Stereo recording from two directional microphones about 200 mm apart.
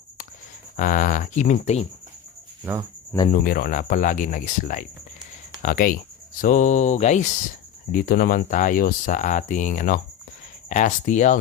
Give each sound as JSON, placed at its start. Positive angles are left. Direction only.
{"t": 0.8, "sound": "speech", "side_deg": 45}
{"t": 3.2, "sound": "speech", "side_deg": 45}
{"t": 7.9, "sound": "speech", "side_deg": 50}